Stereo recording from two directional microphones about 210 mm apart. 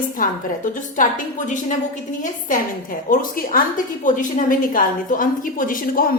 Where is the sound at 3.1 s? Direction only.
40° left (ahead or behind).